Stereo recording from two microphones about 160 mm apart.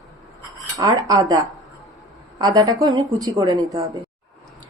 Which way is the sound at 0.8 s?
20° right (ahead or behind).